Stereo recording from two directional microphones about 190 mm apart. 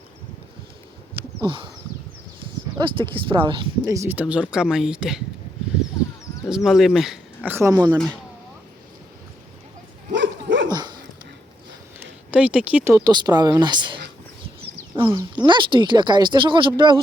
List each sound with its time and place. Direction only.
1.4 s a sound: 25° right (ahead or behind)
2.7 s speech: 25° right (ahead or behind); by 5.2 s 5° right (ahead or behind)
6.5 s speech: centre (ahead or behind); by 7.9 s 20° right (ahead or behind)
10.1 s dog: 70° right (ahead or behind)
10.7 s dog: 20° right (ahead or behind)
12.3 s speech: 5° right (ahead or behind)
13.1 s speech: 20° right (ahead or behind)